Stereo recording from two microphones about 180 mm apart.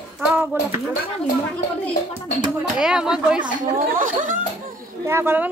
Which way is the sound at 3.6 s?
45° right (ahead or behind).